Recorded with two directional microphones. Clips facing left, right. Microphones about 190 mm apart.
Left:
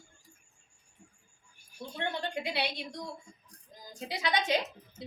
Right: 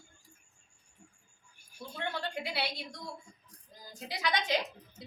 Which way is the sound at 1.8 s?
20° left (ahead or behind).